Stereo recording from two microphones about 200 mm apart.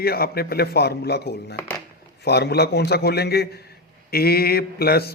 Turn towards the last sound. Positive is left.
turn(degrees=50)  # may be behind; listen again after turning